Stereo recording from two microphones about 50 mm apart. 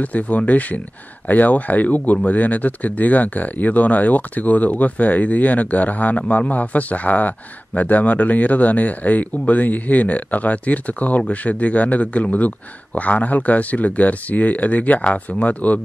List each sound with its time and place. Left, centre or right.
0.0 s speech: left